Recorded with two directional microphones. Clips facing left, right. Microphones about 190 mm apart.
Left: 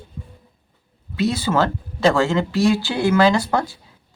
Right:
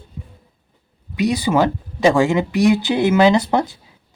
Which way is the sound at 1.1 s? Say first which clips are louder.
Right 2 dB; 15° right (ahead or behind).